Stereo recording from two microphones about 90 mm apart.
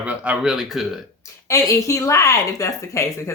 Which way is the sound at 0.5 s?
5° right (ahead or behind).